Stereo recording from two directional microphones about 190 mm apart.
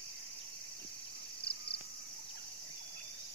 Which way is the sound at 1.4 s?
60° left (ahead or behind).